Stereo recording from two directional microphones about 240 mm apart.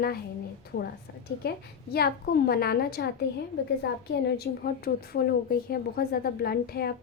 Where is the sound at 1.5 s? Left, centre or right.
Left.